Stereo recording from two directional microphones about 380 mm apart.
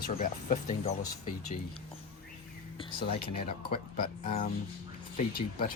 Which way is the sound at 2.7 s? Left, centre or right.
Centre.